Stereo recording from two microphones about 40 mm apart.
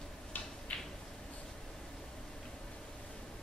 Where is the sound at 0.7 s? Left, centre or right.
Left.